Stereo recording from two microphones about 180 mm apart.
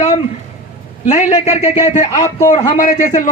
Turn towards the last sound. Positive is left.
turn(degrees=45)  # may be behind; listen again after turning